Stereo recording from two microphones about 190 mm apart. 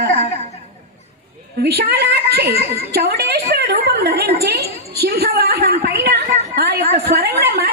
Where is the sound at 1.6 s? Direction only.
55° right (ahead or behind).